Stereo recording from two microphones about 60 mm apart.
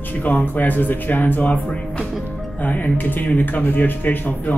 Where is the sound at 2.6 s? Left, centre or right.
Left.